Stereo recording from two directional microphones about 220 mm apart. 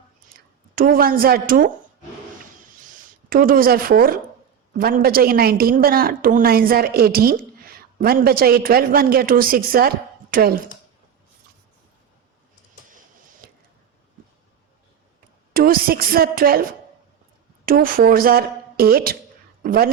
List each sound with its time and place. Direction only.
0.3 s a woman's voice: 40° right (ahead or behind)
2.8 s a woman's voice: 40° right (ahead or behind)
13.4 s a sound: 45° right (ahead or behind)
15.5 s a woman's voice: 40° right (ahead or behind)
17.7 s a woman's voice: 40° right (ahead or behind)